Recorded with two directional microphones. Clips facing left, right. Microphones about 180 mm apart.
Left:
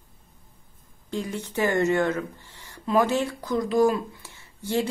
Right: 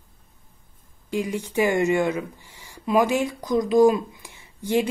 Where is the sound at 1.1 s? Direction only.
10° right (ahead or behind).